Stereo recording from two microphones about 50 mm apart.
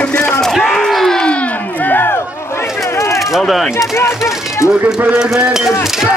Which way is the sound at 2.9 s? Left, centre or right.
Left.